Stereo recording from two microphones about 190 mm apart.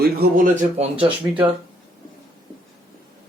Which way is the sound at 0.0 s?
55° right (ahead or behind).